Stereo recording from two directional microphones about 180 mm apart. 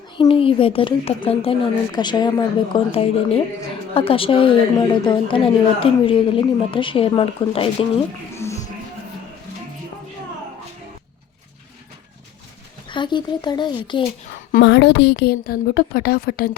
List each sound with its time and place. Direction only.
0.2 s a woman's voice: 30° left (ahead or behind)
12.9 s speech: 25° left (ahead or behind)
14.6 s a woman's voice: 70° left (ahead or behind); by 16.5 s 55° left (ahead or behind)